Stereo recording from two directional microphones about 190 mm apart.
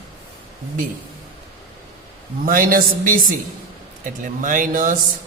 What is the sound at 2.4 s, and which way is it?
Speech, 45° right (ahead or behind).